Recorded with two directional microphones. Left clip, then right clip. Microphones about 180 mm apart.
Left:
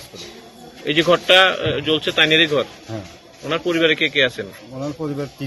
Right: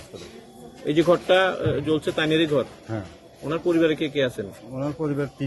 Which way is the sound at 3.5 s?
40° right (ahead or behind).